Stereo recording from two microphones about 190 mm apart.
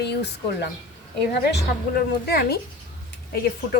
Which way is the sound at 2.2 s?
55° left (ahead or behind).